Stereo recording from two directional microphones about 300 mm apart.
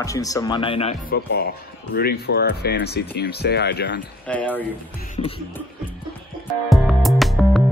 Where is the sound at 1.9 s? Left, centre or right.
Left.